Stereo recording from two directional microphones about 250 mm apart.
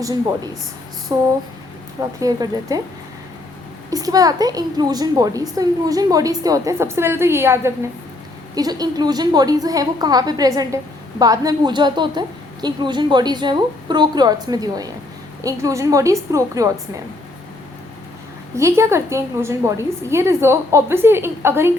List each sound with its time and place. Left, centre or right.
0.0 s a woman's voice: centre
3.8 s a woman's voice: centre
18.5 s a woman's voice: centre